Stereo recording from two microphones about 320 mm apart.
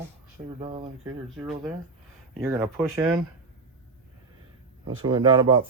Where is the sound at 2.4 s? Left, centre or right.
Centre.